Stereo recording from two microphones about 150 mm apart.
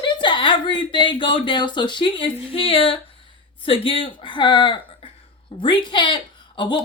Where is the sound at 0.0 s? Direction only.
30° left (ahead or behind).